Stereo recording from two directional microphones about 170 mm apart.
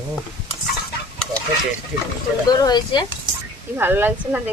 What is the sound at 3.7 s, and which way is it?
Speech, 10° right (ahead or behind).